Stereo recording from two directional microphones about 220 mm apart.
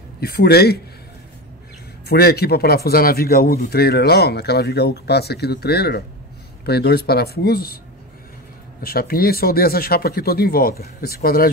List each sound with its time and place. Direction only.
0.2 s a man's voice: 45° left (ahead or behind)
2.0 s a man's voice: 45° left (ahead or behind)
8.8 s a man's voice: 45° left (ahead or behind)